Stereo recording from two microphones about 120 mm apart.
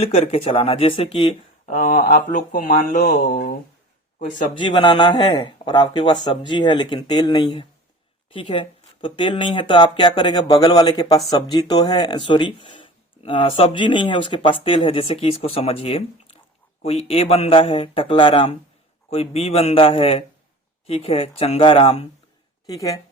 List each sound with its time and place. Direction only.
0.0 s speech: 60° left (ahead or behind)
2.9 s a sound: 90° left
4.5 s speech: 40° left (ahead or behind)
22.6 s speech: 30° left (ahead or behind)